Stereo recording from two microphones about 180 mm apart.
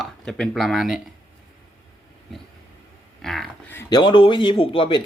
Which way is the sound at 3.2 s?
Centre (ahead or behind).